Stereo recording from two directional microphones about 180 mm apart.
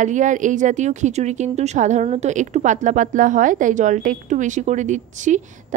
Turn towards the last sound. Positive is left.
turn(degrees=-45)  # may be behind; listen again after turning